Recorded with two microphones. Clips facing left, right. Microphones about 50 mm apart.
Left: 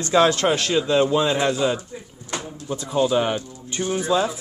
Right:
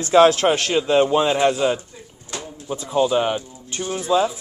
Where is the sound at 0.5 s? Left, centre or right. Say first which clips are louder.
Right 2 dB; right.